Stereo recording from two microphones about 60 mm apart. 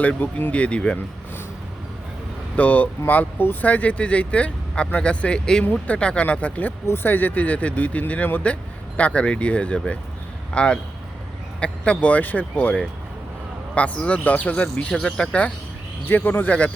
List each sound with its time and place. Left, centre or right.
0.0 s speech: left
2.6 s speech: left
6.8 s speech: left; by 15.5 s centre
16.0 s speech: left